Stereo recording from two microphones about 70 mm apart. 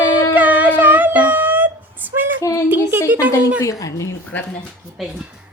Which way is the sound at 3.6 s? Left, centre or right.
Left.